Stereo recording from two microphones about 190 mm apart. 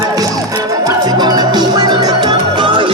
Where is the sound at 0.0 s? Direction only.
20° right (ahead or behind).